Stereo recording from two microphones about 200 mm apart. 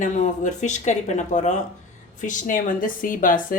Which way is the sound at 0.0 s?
40° left (ahead or behind).